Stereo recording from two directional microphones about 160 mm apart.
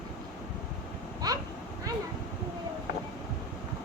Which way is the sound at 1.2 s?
25° right (ahead or behind).